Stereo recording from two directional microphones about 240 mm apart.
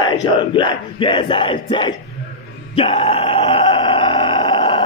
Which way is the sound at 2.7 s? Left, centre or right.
Left.